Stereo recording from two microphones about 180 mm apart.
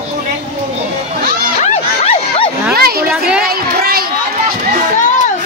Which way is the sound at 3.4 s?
55° right (ahead or behind).